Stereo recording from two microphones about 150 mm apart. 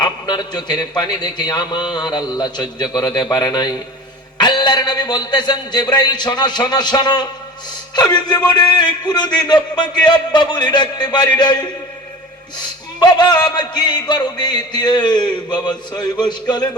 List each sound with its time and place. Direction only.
0.0 s a man's voice: 30° left (ahead or behind)